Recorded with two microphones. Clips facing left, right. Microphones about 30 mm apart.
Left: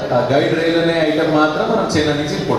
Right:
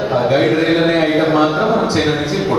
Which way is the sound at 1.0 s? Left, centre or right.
Centre.